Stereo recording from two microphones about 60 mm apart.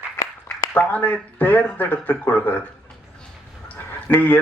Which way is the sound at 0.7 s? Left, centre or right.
Left.